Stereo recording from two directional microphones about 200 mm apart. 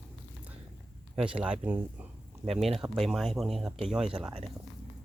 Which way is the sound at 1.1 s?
5° right (ahead or behind).